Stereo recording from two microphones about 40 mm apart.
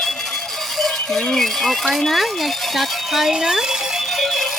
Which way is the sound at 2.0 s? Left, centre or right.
Centre.